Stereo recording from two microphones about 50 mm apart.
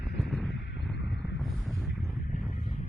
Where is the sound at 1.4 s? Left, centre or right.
Centre.